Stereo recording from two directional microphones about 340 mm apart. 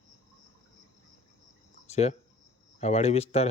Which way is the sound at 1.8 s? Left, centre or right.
Centre.